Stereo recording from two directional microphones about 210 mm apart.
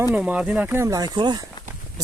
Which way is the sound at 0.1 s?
5° right (ahead or behind).